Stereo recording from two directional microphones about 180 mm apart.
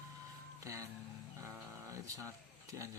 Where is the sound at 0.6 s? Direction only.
20° right (ahead or behind).